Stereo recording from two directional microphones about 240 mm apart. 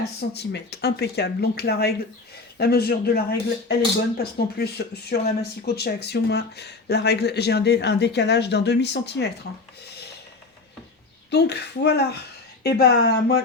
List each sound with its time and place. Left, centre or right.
0.2 s speech: left
11.3 s speech: left